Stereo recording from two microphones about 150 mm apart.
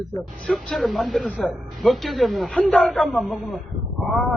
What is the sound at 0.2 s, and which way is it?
Speech, centre (ahead or behind).